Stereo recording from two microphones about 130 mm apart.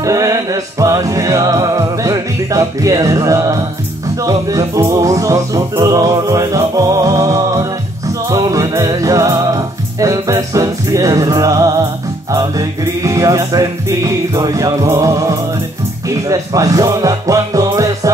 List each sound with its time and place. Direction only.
0.0 s music: 25° right (ahead or behind)